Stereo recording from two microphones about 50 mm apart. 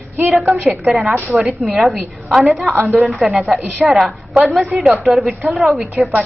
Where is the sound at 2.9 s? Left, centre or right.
Centre.